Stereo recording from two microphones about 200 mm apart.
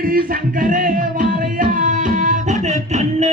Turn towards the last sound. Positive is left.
turn(degrees=-35)  # may be behind; listen again after turning